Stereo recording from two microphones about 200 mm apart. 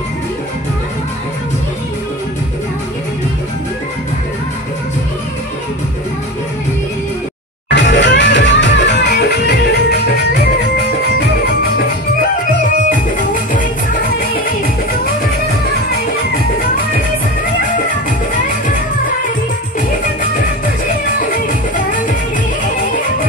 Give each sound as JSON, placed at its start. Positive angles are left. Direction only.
{"t": 7.7, "sound": "music", "side_deg": 65}
{"t": 14.3, "sound": "music", "side_deg": 45}
{"t": 21.2, "sound": "music", "side_deg": 45}